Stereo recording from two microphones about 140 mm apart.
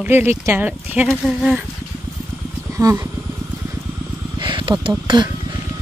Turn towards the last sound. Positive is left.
turn(degrees=-30)  # may be behind; listen again after turning